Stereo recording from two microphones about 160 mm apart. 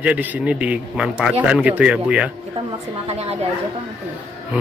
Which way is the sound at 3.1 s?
40° right (ahead or behind).